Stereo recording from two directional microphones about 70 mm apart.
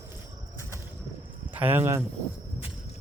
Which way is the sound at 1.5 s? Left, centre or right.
Right.